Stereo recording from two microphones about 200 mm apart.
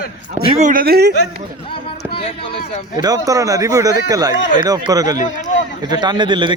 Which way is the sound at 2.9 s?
20° right (ahead or behind).